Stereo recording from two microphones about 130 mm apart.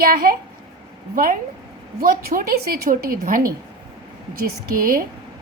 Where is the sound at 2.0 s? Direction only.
90° right.